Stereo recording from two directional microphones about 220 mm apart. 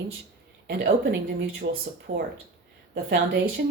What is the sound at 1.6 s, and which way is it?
Speech, 45° right (ahead or behind).